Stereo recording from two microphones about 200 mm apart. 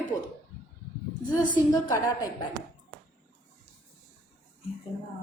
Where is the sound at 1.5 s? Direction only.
15° left (ahead or behind).